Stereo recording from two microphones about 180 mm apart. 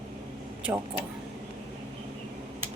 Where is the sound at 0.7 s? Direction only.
15° right (ahead or behind).